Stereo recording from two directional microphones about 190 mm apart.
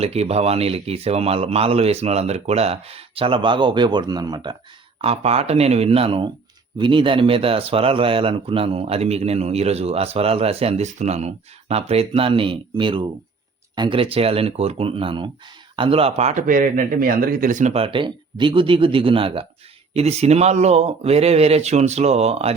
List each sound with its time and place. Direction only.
0.0 s a man's voice: 35° right (ahead or behind)